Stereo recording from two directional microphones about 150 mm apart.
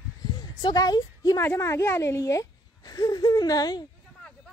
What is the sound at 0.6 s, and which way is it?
A woman's voice, 25° left (ahead or behind).